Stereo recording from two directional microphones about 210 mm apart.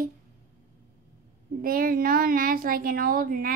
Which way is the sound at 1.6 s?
45° right (ahead or behind).